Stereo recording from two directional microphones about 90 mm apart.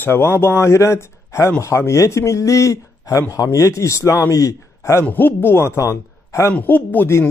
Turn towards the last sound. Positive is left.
turn(degrees=25)  # may be behind; listen again after turning